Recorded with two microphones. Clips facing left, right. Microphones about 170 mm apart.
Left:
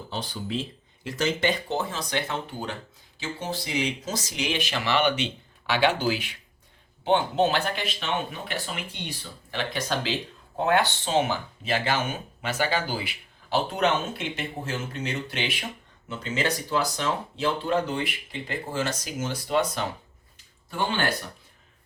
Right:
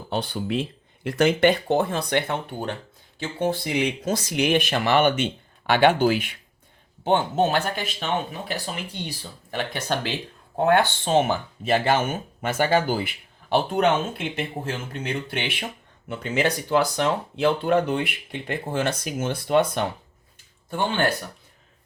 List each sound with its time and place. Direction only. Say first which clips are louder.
0.1 s speech: right 6 dB; 60° right (ahead or behind)